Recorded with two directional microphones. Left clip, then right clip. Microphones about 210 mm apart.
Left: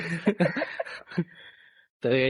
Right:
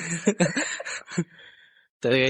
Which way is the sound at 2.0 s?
10° right (ahead or behind).